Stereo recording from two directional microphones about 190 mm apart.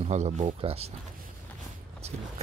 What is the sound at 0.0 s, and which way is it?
Speech, 35° right (ahead or behind).